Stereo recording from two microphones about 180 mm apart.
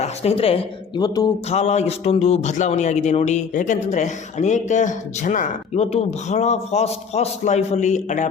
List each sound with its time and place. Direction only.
0.0 s speech: 35° left (ahead or behind)
1.5 s a man's voice: 40° left (ahead or behind)